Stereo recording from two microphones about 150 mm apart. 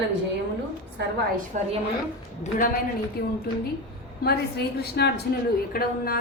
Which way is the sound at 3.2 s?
90° left.